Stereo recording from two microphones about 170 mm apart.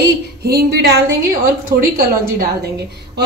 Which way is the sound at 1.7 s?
20° right (ahead or behind).